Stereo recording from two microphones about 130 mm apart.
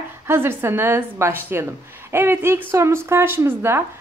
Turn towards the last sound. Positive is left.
turn(degrees=-15)  # may be behind; listen again after turning